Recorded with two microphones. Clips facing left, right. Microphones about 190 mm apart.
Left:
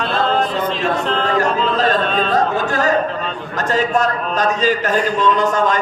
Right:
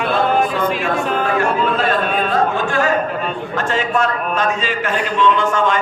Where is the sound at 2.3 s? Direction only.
40° left (ahead or behind).